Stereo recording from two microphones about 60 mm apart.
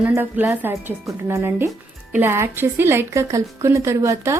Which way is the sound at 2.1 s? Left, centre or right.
Right.